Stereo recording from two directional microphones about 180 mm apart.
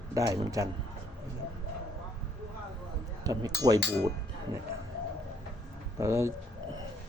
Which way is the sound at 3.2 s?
20° right (ahead or behind).